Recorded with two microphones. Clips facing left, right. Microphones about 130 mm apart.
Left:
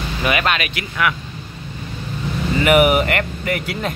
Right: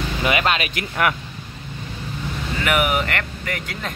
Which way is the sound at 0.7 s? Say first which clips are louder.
Even; 40° right (ahead or behind).